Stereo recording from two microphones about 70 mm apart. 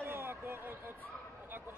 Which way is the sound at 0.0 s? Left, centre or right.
Right.